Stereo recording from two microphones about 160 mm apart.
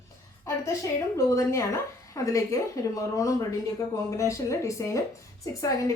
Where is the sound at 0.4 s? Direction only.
20° left (ahead or behind).